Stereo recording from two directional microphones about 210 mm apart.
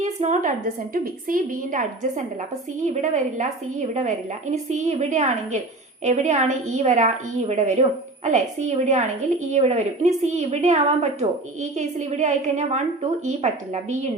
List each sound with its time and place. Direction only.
0.0 s a woman's voice: 35° right (ahead or behind)